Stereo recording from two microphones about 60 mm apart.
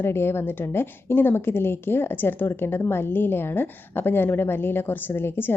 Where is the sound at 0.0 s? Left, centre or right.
Left.